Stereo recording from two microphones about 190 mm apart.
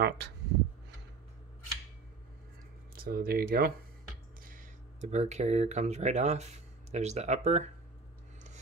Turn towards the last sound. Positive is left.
turn(degrees=-35)  # may be behind; listen again after turning